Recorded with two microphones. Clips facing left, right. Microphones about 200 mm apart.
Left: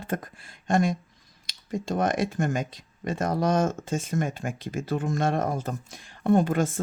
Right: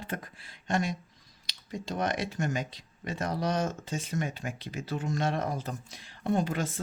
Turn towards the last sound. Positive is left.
turn(degrees=50)  # may be behind; listen again after turning